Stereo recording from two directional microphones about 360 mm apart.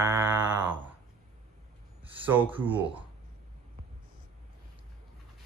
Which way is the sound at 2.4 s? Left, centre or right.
Centre.